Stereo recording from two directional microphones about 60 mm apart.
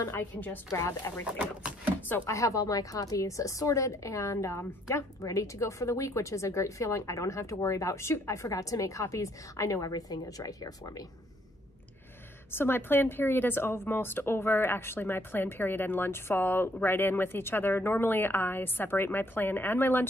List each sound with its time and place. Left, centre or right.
0.1 s a woman's voice: left
0.7 s speech: left
2.0 s a sound: left
2.2 s speech: left
12.4 s a woman's voice: left